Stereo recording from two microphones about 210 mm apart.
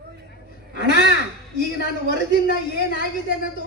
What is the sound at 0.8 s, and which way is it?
Speech, 60° right (ahead or behind).